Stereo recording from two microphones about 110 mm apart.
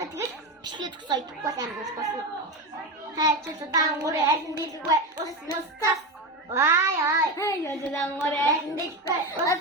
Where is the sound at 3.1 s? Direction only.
35° right (ahead or behind).